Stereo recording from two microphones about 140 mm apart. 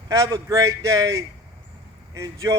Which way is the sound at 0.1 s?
25° right (ahead or behind).